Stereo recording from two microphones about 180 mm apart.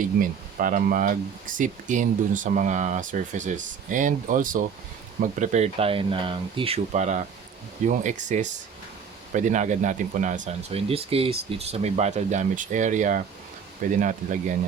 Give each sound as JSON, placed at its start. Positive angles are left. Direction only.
{"t": 0.2, "sound": "speech", "side_deg": -50}